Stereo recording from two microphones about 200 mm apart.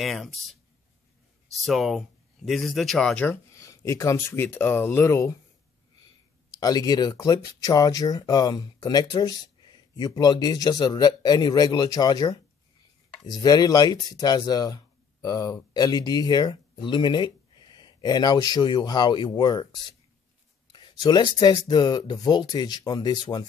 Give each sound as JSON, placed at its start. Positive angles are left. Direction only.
{"t": 0.0, "sound": "speech", "side_deg": 0}
{"t": 1.6, "sound": "speech", "side_deg": 0}
{"t": 6.6, "sound": "speech", "side_deg": 20}
{"t": 20.7, "sound": "speech", "side_deg": 20}